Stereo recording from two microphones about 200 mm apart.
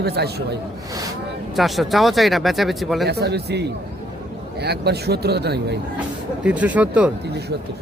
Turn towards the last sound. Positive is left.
turn(degrees=-5)  # may be behind; listen again after turning